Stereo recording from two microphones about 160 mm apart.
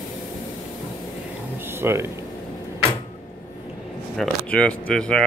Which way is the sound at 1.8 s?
15° right (ahead or behind).